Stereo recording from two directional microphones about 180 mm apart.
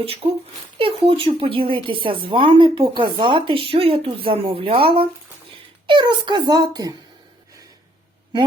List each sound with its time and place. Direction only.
0.0 s speech: 30° right (ahead or behind)